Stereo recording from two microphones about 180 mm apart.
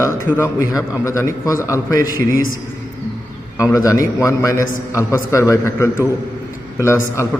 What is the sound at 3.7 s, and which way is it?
A man's voice, 20° left (ahead or behind).